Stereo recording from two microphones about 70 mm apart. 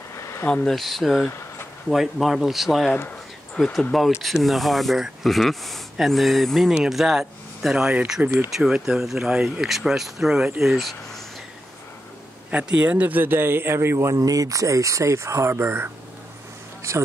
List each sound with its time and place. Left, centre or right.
0.1 s a sound: left
0.7 s speech: centre
3.1 s a sound: centre
4.2 s speech: centre
12.4 s a man's voice: right
13.9 s a man's voice: right